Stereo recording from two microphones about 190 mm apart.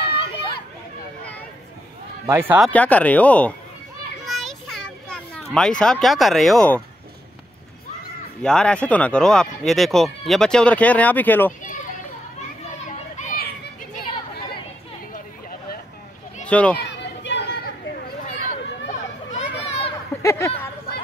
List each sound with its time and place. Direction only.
2.2 s speech: 15° right (ahead or behind)
2.6 s speech: 10° left (ahead or behind)
4.3 s children playing: centre (ahead or behind)
5.5 s speech: 5° left (ahead or behind)
8.4 s speech: 5° left (ahead or behind)
12.8 s children playing: 40° left (ahead or behind)
16.4 s speech: 5° left (ahead or behind)
16.7 s a sound: 65° left (ahead or behind); by 19.9 s 35° left (ahead or behind)
20.2 s a sound: 15° left (ahead or behind)